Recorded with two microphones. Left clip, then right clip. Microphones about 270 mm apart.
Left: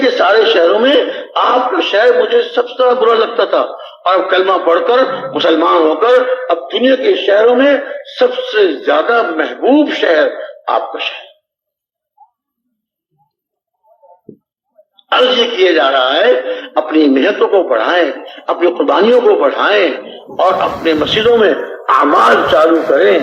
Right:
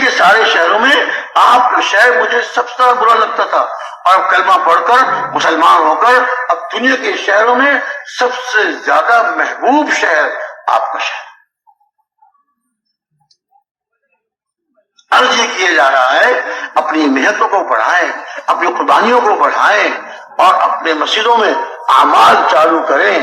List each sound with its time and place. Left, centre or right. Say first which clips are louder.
0.0 s a man's voice: right 1 dB; right
10.8 s a sound: right 3 dB; right
15.2 s a man's voice: left 3 dB; right